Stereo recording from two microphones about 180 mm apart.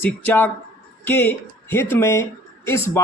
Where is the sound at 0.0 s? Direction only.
10° left (ahead or behind).